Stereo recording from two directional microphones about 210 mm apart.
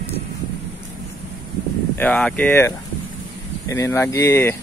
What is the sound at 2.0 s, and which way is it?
Speech, 5° left (ahead or behind).